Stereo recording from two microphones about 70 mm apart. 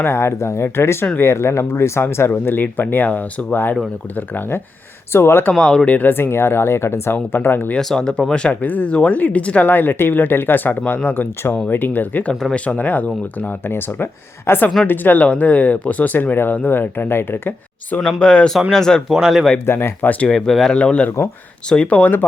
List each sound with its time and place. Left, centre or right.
0.0 s speech: left
5.5 s speech: centre
5.8 s speech: left
7.8 s speech: centre
8.6 s speech: left
12.3 s speech: centre
13.7 s speech: left
18.2 s speech: centre
19.0 s speech: centre
19.6 s speech: left
20.0 s speech: left